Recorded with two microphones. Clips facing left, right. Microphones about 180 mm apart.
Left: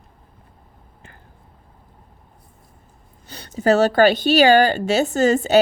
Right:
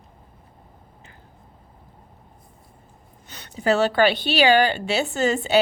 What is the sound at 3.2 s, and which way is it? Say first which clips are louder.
A woman's voice: left 4 dB; 35° left (ahead or behind).